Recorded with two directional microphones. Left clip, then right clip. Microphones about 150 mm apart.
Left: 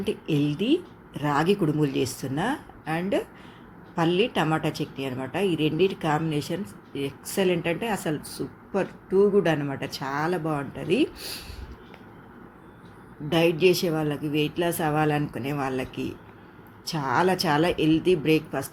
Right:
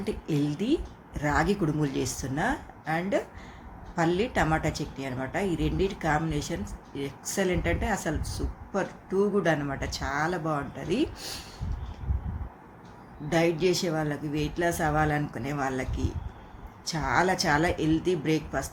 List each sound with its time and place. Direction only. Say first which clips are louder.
0.0 s a woman's voice: left 4 dB; centre (ahead or behind)
13.3 s a woman's voice: left 4 dB; centre (ahead or behind)